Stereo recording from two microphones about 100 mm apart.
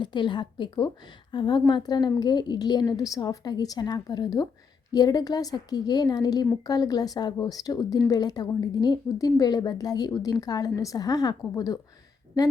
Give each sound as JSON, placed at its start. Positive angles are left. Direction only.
{"t": 0.0, "sound": "a woman's voice", "side_deg": 50}